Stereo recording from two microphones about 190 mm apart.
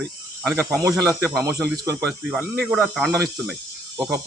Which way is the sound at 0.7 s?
15° right (ahead or behind).